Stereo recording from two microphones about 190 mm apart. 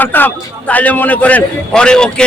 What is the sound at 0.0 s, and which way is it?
A man's voice, 10° left (ahead or behind).